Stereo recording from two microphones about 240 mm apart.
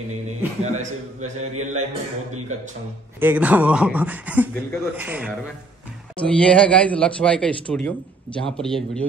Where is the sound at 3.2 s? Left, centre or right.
Centre.